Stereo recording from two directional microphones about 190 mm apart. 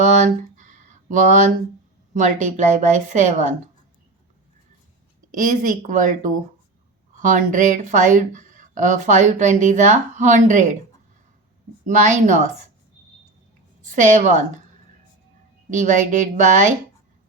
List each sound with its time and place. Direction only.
0.0 s a sound: 40° right (ahead or behind)
2.1 s speech: 40° right (ahead or behind)
5.3 s a woman's voice: 40° right (ahead or behind)
11.9 s speech: 40° right (ahead or behind)
13.8 s speech: 40° right (ahead or behind)
15.7 s speech: 40° right (ahead or behind)